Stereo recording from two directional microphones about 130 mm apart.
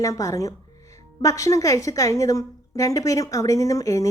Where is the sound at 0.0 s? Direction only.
25° left (ahead or behind).